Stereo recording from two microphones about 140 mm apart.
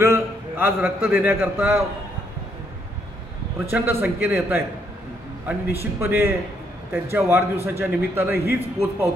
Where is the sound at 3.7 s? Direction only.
15° right (ahead or behind).